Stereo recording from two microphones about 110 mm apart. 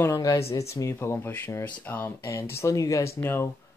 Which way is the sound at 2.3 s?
30° left (ahead or behind).